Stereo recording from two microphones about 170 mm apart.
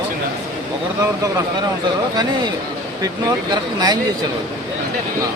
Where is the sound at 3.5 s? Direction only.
25° right (ahead or behind).